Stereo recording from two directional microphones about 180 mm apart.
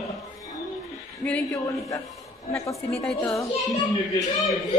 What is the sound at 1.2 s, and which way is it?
Speech, 10° left (ahead or behind).